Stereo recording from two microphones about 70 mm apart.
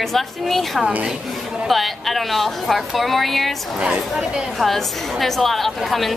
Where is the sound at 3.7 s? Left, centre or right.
Centre.